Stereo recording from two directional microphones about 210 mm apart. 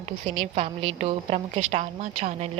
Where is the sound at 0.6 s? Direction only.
30° right (ahead or behind).